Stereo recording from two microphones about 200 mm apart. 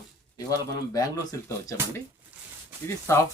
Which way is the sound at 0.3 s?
20° left (ahead or behind).